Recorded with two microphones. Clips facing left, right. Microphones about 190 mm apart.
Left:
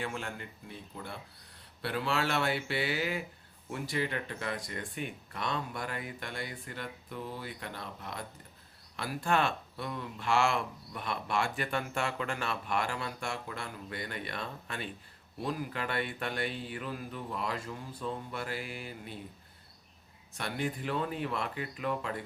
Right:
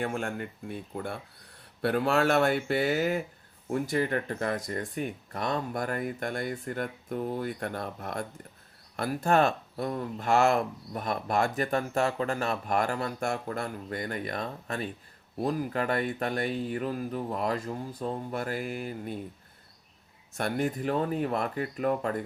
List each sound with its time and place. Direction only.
0.0 s speech: 50° right (ahead or behind)
20.3 s speech: 45° right (ahead or behind)